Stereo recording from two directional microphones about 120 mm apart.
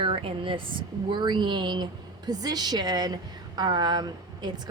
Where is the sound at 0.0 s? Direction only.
50° right (ahead or behind).